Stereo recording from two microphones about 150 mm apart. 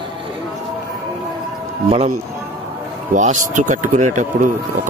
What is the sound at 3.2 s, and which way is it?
Speech, 55° right (ahead or behind).